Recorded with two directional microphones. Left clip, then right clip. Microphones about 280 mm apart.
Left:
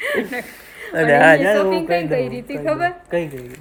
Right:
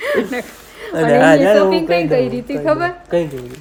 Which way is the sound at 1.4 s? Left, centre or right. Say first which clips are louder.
Right 5 dB; centre.